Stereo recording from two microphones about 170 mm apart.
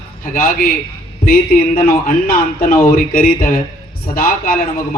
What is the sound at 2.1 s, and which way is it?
A man's voice, 55° left (ahead or behind).